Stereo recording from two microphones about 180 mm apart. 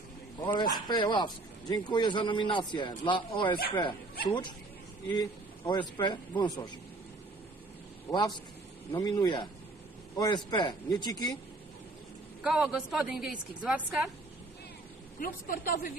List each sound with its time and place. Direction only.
0.6 s speech: 25° left (ahead or behind)
8.1 s speech: 25° left (ahead or behind)
12.4 s a woman's voice: centre (ahead or behind)
15.1 s a woman's voice: 50° left (ahead or behind)